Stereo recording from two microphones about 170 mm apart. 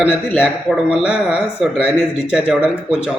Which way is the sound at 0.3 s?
5° right (ahead or behind).